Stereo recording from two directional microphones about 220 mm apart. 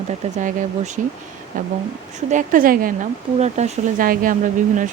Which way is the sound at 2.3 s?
35° right (ahead or behind).